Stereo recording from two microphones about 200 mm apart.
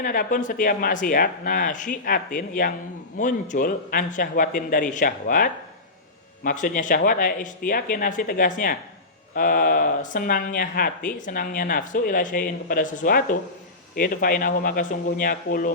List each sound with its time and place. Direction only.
0.0 s speech: 45° left (ahead or behind)